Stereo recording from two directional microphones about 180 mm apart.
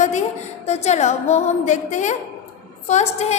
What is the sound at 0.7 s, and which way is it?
A woman's voice, 35° left (ahead or behind).